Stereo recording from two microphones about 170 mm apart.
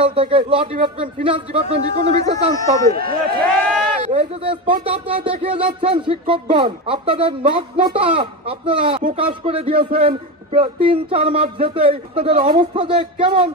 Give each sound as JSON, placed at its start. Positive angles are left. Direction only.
{"t": 0.0, "sound": "speech", "side_deg": -30}
{"t": 2.5, "sound": "speech", "side_deg": 20}
{"t": 2.9, "sound": "speech", "side_deg": -60}
{"t": 4.0, "sound": "a man's voice", "side_deg": -40}